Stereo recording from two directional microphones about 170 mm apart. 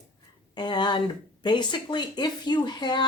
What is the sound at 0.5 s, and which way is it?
Speech, 25° left (ahead or behind).